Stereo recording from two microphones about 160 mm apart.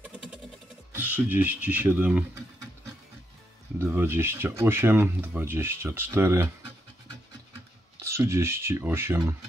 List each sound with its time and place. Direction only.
0.0 s a sound: 5° right (ahead or behind)
0.9 s speech: 10° right (ahead or behind)
3.8 s speech: 15° right (ahead or behind)
8.0 s speech: 15° right (ahead or behind)